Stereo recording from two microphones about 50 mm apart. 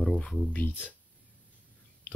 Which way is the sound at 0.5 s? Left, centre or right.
Left.